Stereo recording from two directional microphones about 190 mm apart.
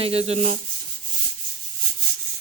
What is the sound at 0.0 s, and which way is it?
Rub, 30° right (ahead or behind).